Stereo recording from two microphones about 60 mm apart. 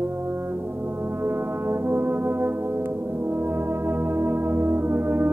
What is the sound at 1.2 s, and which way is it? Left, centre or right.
Brass instrument, right.